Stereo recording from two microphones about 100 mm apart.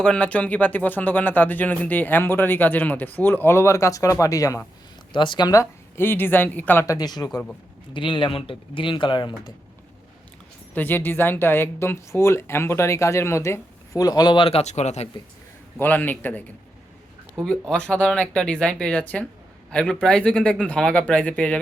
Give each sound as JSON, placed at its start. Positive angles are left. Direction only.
{"t": 0.0, "sound": "speech", "side_deg": 10}
{"t": 5.1, "sound": "speech", "side_deg": 50}
{"t": 5.5, "sound": "speech", "side_deg": 25}
{"t": 6.8, "sound": "speech", "side_deg": 40}
{"t": 7.9, "sound": "speech", "side_deg": 55}
{"t": 10.8, "sound": "speech", "side_deg": 20}
{"t": 14.4, "sound": "speech", "side_deg": 85}
{"t": 15.8, "sound": "speech", "side_deg": 20}